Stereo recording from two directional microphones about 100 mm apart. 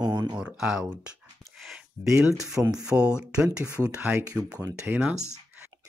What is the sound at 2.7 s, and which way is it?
Speech, 10° right (ahead or behind).